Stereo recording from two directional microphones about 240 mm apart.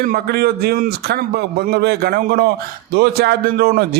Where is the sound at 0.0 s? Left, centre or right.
Right.